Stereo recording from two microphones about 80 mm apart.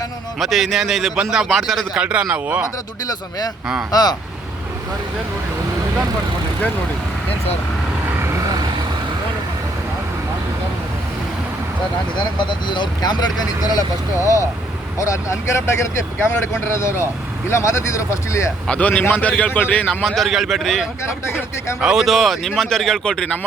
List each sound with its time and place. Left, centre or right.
0.3 s speech: centre
1.5 s speech: centre
2.0 s a man's voice: centre
3.9 s speech: left
12.4 s speech: left
14.2 s speech: left
18.7 s a man's voice: centre
19.9 s speech: centre